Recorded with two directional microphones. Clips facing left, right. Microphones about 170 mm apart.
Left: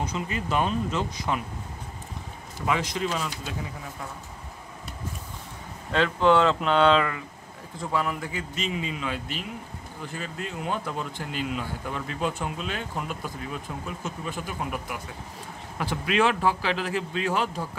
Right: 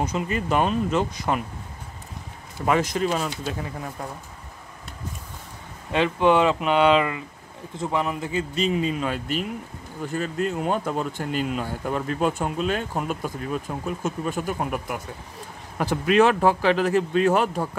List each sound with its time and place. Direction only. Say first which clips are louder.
0.0 s speech: right 5 dB; 50° right (ahead or behind)
2.6 s speech: right 5 dB; 45° right (ahead or behind)
5.9 s a man's voice: right 2 dB; 15° right (ahead or behind); by 17.6 s 50° right (ahead or behind)